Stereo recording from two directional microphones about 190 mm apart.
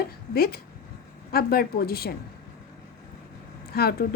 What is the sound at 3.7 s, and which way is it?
Speech, 55° left (ahead or behind).